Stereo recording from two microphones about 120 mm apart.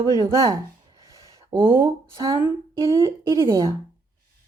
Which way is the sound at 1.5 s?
20° right (ahead or behind).